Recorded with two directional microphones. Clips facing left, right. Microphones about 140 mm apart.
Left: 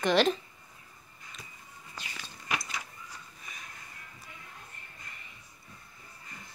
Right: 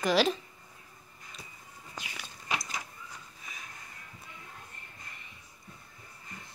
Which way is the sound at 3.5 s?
Centre (ahead or behind).